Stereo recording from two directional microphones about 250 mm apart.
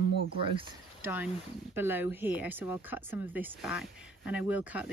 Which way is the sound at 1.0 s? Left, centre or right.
Centre.